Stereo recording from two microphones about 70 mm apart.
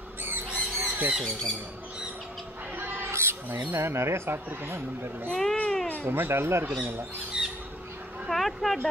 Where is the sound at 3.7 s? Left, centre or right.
Right.